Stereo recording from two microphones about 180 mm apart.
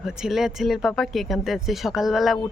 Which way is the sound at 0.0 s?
5° right (ahead or behind).